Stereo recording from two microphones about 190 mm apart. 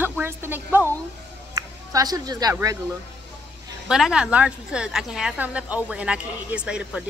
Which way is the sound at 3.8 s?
5° right (ahead or behind).